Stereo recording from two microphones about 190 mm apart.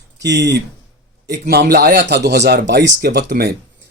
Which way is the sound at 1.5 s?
55° right (ahead or behind).